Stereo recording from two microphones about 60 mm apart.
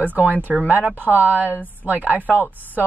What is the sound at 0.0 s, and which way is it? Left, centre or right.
A woman's voice, right.